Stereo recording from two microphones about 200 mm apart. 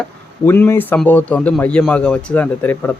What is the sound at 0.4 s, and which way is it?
Speech, 10° left (ahead or behind).